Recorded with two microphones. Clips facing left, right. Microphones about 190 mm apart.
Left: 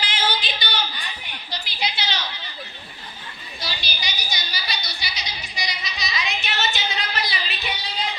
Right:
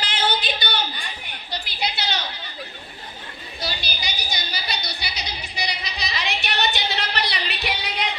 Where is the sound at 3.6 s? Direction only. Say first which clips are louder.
Right 2 dB; 55° right (ahead or behind).